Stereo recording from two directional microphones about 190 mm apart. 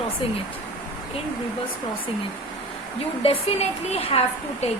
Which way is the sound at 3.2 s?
30° left (ahead or behind).